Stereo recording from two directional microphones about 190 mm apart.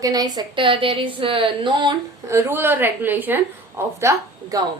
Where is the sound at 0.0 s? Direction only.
20° right (ahead or behind).